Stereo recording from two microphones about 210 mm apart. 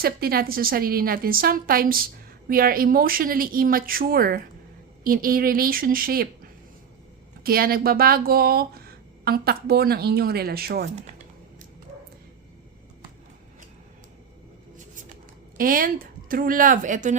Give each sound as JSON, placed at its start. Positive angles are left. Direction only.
{"t": 0.0, "sound": "a woman's voice", "side_deg": -45}
{"t": 15.5, "sound": "speech", "side_deg": -40}